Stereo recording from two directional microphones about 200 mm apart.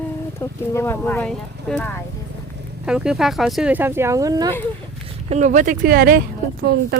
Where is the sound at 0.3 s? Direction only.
15° left (ahead or behind).